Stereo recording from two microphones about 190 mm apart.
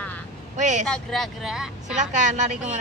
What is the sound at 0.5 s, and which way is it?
Speech, 40° right (ahead or behind).